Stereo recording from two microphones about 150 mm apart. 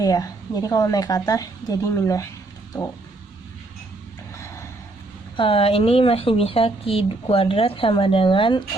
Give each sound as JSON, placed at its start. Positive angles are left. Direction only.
{"t": 0.0, "sound": "a woman's voice", "side_deg": 25}
{"t": 4.4, "sound": "a sound", "side_deg": 20}
{"t": 5.4, "sound": "speech", "side_deg": 40}